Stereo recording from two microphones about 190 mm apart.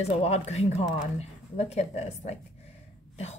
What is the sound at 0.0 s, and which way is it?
Speech, 35° left (ahead or behind).